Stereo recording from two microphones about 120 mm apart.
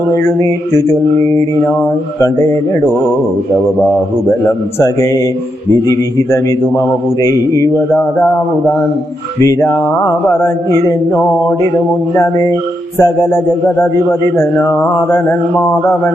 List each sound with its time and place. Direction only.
0.3 s speech: 25° left (ahead or behind)
2.2 s speech: 25° left (ahead or behind)
4.8 s speech: 25° left (ahead or behind)
9.4 s speech: 25° left (ahead or behind)